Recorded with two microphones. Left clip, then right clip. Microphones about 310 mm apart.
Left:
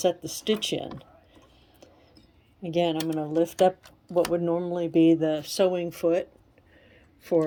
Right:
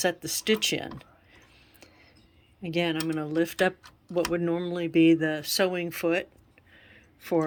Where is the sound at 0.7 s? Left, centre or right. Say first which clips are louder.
Even; right.